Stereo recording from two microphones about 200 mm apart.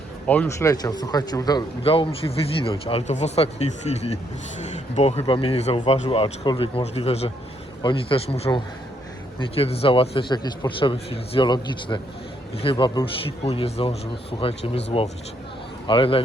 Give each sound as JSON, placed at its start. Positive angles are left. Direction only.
{"t": 0.3, "sound": "speech", "side_deg": 10}
{"t": 13.4, "sound": "speech", "side_deg": 30}
{"t": 15.9, "sound": "speech", "side_deg": 25}